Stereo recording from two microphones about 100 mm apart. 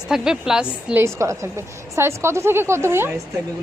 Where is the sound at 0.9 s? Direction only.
30° right (ahead or behind).